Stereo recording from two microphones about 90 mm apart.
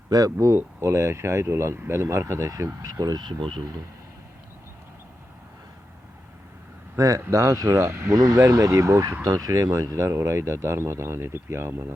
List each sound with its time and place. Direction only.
0.1 s speech: 40° right (ahead or behind); by 3.6 s 60° right (ahead or behind)
6.9 s speech: 40° right (ahead or behind)